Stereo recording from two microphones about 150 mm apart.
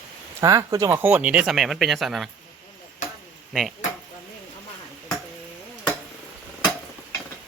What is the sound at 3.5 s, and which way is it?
Speech, centre (ahead or behind).